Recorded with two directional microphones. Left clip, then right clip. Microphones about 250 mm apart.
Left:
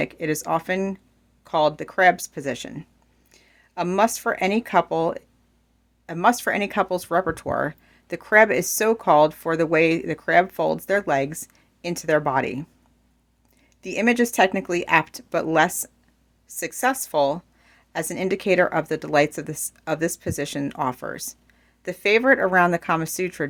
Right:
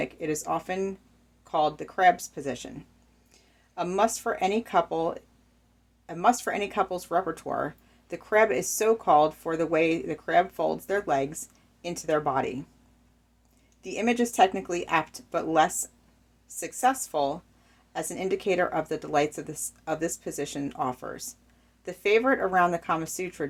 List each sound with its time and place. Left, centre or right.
0.0 s speech: left
13.8 s speech: left